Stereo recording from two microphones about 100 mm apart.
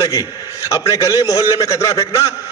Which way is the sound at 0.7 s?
35° left (ahead or behind).